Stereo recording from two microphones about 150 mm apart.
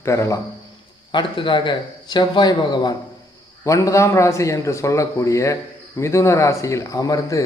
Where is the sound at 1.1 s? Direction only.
30° left (ahead or behind).